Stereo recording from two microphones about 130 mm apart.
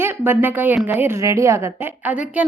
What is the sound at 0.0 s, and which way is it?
A woman's voice, 15° right (ahead or behind).